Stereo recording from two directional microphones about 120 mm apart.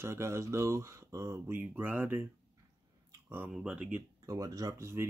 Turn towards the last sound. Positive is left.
turn(degrees=-25)  # may be behind; listen again after turning